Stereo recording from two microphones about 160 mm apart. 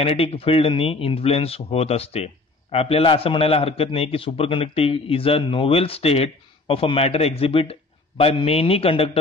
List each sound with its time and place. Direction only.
0.0 s speech: 40° left (ahead or behind)